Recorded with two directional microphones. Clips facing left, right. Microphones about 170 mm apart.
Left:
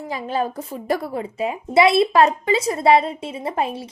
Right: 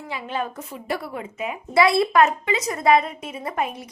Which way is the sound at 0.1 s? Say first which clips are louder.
Left 4 dB; 40° left (ahead or behind).